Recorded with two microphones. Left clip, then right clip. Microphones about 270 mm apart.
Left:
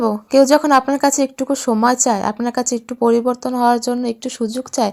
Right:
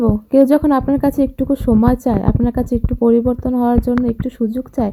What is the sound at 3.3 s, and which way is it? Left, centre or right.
Speech, centre.